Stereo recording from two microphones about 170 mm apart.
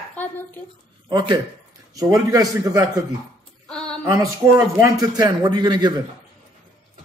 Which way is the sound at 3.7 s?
5° left (ahead or behind).